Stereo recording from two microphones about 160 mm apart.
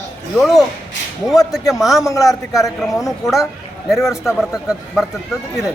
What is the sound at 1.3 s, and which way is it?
Speech, 20° left (ahead or behind).